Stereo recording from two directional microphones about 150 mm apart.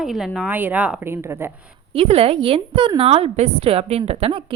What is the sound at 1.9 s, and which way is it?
A woman's voice, 40° right (ahead or behind).